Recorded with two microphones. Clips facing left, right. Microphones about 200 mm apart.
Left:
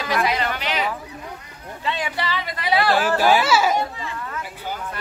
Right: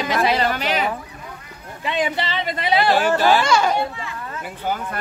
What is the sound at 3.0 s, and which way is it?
Speech, 10° left (ahead or behind).